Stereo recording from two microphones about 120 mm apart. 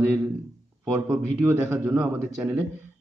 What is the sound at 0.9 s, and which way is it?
Speech, 15° right (ahead or behind).